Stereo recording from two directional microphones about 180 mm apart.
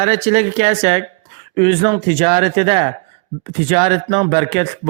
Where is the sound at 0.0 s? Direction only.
35° right (ahead or behind).